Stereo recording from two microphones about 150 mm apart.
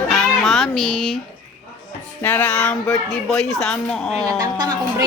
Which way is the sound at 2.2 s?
10° left (ahead or behind).